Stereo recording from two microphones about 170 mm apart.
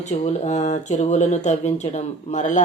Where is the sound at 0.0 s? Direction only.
40° left (ahead or behind).